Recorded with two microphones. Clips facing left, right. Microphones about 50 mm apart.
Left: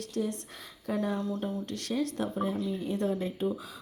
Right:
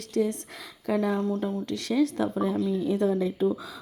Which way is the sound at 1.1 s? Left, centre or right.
Right.